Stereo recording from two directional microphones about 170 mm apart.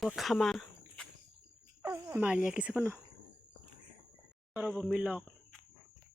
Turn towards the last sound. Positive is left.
turn(degrees=-5)  # may be behind; listen again after turning